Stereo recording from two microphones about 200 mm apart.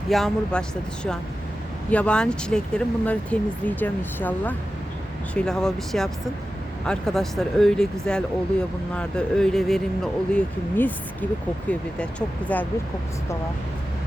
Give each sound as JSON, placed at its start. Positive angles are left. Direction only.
{"t": 0.1, "sound": "speech", "side_deg": 0}
{"t": 1.9, "sound": "speech", "side_deg": 5}